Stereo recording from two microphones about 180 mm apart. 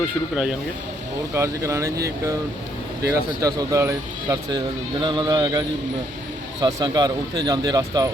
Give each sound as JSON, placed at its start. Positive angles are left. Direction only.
{"t": 1.3, "sound": "speech", "side_deg": -15}